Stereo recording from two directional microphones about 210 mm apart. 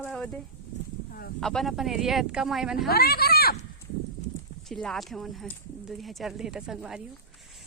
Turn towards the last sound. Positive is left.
turn(degrees=-5)  # may be behind; listen again after turning